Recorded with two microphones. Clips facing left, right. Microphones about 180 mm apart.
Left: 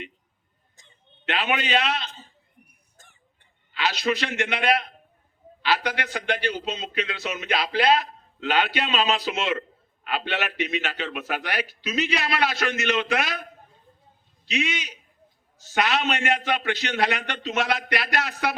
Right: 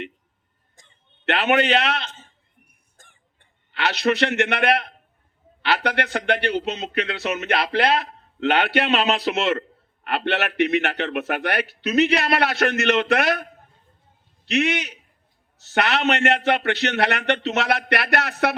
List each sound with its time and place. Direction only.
0.8 s a man's voice: 65° right (ahead or behind)
2.6 s a sound: 50° right (ahead or behind)
3.7 s speech: 65° right (ahead or behind)